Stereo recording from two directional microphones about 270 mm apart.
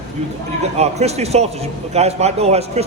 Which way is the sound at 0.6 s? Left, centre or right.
Right.